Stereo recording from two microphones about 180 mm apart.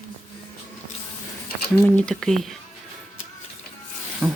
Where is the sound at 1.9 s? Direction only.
5° left (ahead or behind).